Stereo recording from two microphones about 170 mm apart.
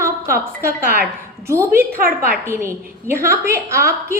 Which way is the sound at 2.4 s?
15° right (ahead or behind).